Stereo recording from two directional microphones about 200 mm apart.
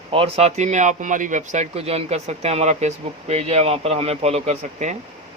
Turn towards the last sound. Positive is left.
turn(degrees=-35)  # may be behind; listen again after turning